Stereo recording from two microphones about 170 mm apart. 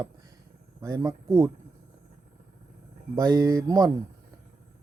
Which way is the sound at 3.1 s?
20° right (ahead or behind).